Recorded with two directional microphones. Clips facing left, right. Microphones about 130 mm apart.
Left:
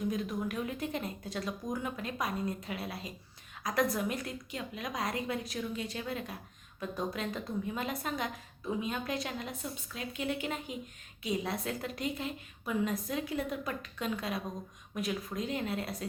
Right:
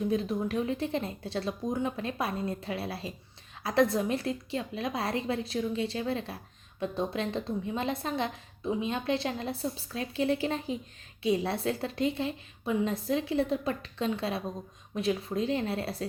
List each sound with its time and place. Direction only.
0.1 s a woman's voice: 30° right (ahead or behind)